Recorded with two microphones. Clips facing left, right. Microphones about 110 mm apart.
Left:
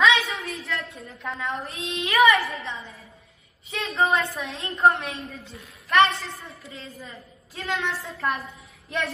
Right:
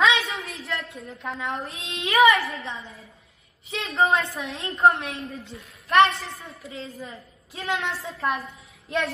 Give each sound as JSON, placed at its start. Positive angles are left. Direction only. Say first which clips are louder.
{"t": 0.1, "sound": "a sound", "louder": "left 1 dB", "side_deg": 0}
{"t": 1.9, "sound": "a woman's voice", "louder": "right 1 dB", "side_deg": -30}
{"t": 2.3, "sound": "a woman's voice", "louder": "left 1 dB", "side_deg": 0}